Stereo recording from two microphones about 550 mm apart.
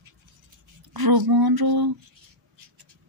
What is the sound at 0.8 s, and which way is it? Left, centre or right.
Speech, right.